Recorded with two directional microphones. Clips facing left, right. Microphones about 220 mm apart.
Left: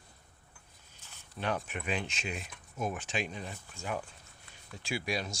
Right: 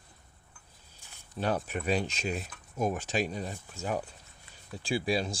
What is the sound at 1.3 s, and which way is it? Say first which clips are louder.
Speech: right 4 dB; 35° right (ahead or behind).